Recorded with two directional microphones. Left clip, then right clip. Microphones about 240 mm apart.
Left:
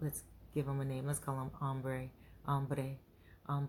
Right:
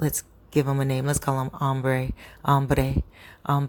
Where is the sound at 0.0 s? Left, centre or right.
Right.